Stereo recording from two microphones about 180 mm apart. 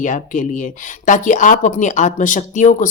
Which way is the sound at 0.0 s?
45° left (ahead or behind).